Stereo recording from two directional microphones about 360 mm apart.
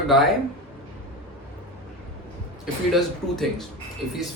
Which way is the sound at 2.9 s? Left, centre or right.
Centre.